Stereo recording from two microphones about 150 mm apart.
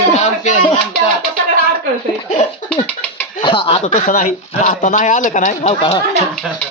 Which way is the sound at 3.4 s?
35° left (ahead or behind).